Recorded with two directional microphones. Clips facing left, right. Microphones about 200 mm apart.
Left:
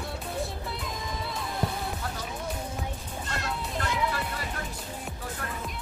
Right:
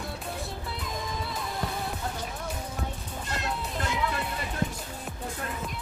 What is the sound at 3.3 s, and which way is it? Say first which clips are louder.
Music: right 1 dB; 20° right (ahead or behind).